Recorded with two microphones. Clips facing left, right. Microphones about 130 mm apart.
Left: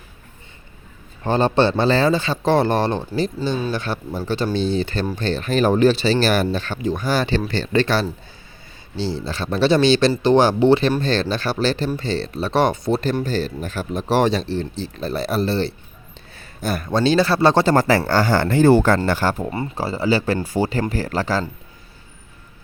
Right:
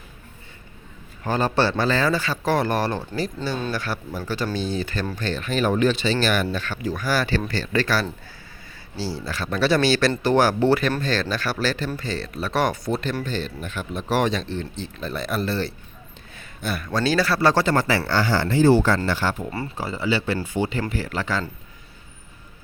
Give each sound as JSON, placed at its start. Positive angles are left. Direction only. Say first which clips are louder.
{"t": 1.2, "sound": "speech", "louder": "left 4 dB", "side_deg": 30}
{"t": 13.2, "sound": "speech", "louder": "left 5 dB", "side_deg": 35}
{"t": 16.3, "sound": "a sound", "louder": "left 4 dB", "side_deg": 35}
{"t": 16.9, "sound": "speech", "louder": "left 5 dB", "side_deg": 25}
{"t": 17.7, "sound": "speech", "louder": "left 5 dB", "side_deg": 40}
{"t": 19.5, "sound": "speech", "louder": "left 4 dB", "side_deg": 25}
{"t": 19.7, "sound": "speech", "louder": "left 5 dB", "side_deg": 35}